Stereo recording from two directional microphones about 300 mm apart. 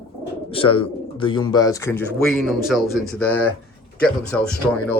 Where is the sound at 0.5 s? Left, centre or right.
Centre.